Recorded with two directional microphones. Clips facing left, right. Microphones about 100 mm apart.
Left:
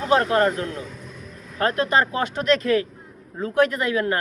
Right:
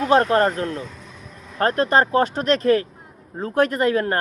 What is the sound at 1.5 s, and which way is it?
Speech, 40° right (ahead or behind).